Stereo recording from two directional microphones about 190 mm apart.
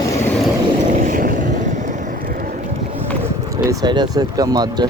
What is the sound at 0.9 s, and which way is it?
Vehicle, 45° right (ahead or behind).